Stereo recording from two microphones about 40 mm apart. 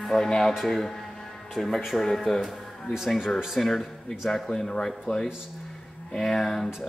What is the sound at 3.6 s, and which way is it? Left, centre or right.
Speech, centre.